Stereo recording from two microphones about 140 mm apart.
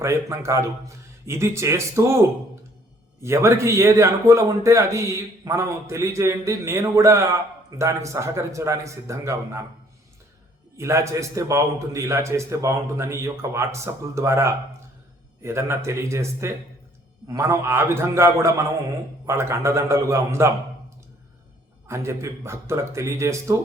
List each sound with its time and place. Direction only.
0.0 s a man's voice: 20° right (ahead or behind)
3.2 s a man's voice: 20° right (ahead or behind)
10.8 s a man's voice: 20° right (ahead or behind)
21.8 s a man's voice: 20° right (ahead or behind)